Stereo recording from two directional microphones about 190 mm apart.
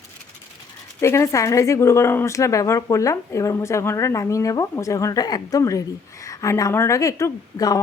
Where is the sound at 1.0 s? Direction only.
15° left (ahead or behind).